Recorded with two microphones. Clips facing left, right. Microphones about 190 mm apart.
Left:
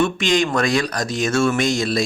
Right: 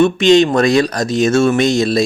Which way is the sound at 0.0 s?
25° right (ahead or behind).